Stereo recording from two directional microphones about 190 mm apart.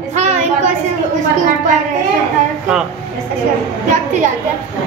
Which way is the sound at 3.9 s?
40° right (ahead or behind).